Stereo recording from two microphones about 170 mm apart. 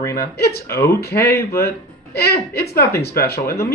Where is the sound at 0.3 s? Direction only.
70° left (ahead or behind).